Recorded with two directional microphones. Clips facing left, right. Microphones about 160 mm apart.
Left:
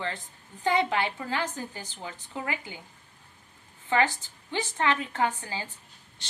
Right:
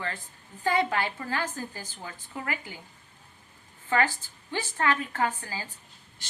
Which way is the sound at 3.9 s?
20° left (ahead or behind).